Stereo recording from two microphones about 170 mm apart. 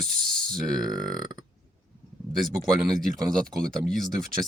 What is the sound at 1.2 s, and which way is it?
Burping, 25° right (ahead or behind).